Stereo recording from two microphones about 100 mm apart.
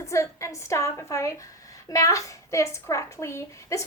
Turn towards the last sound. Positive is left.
turn(degrees=30)  # may be behind; listen again after turning